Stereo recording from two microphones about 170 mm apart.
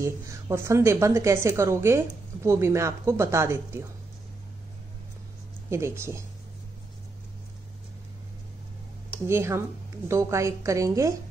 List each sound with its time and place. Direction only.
0.0 s a woman's voice: 15° right (ahead or behind)
5.7 s a woman's voice: 15° right (ahead or behind)
9.3 s a woman's voice: 15° right (ahead or behind)